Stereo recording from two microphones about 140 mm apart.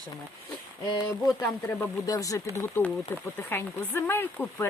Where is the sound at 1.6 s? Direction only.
20° left (ahead or behind).